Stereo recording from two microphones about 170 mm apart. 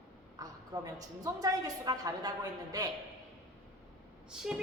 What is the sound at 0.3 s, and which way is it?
A woman's voice, 20° right (ahead or behind).